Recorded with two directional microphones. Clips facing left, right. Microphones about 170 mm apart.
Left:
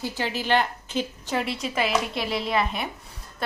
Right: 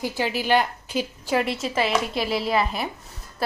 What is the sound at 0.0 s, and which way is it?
A woman's voice, 15° right (ahead or behind).